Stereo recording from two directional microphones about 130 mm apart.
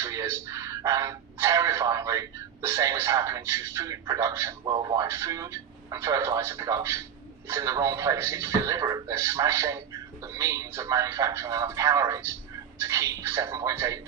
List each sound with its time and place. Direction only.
0.0 s speech: 25° right (ahead or behind)